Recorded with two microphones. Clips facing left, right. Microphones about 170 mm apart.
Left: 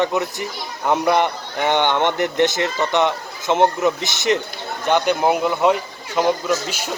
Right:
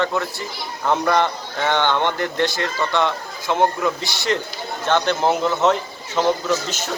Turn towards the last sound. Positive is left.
turn(degrees=10)  # may be behind; listen again after turning